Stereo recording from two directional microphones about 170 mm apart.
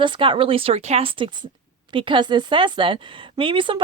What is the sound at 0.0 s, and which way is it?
A woman's voice, 30° right (ahead or behind).